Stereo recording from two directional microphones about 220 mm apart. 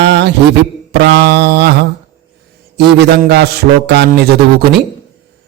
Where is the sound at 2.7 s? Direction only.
50° right (ahead or behind).